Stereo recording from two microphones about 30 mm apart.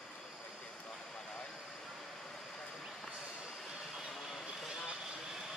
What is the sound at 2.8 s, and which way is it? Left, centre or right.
Vehicle, centre.